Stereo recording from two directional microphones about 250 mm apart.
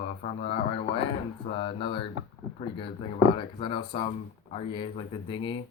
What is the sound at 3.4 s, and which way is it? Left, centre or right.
Speech, centre.